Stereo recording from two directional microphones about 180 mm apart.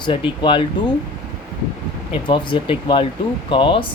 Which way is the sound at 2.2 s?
25° left (ahead or behind).